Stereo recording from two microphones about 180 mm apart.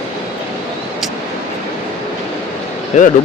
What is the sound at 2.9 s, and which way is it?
Speech, 40° left (ahead or behind).